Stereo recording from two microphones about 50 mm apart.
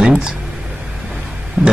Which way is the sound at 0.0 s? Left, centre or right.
Centre.